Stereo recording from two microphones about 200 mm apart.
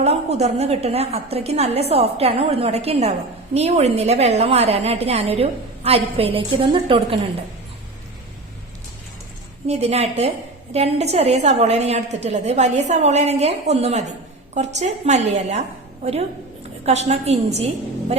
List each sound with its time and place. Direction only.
0.0 s a woman's voice: 30° right (ahead or behind)
9.6 s a woman's voice: 30° right (ahead or behind)
16.8 s a woman's voice: 30° right (ahead or behind)